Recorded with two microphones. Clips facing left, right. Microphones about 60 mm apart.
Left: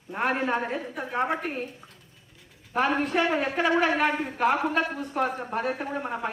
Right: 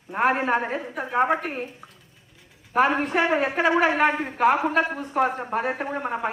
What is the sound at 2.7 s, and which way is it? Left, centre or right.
A woman's voice, right.